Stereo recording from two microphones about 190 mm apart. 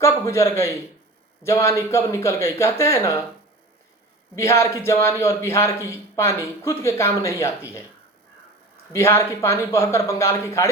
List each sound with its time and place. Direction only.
0.0 s a man's voice: 15° left (ahead or behind)
4.4 s a man's voice: 15° left (ahead or behind)
8.9 s a man's voice: 15° left (ahead or behind)